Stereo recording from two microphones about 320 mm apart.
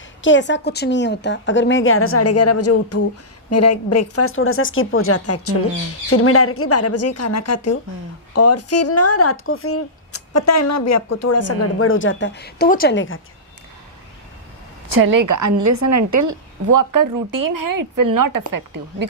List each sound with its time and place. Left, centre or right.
0.2 s a woman's voice: left
15.0 s a woman's voice: right